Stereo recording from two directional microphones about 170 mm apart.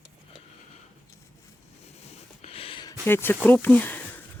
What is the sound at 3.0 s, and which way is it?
Speech, 15° left (ahead or behind).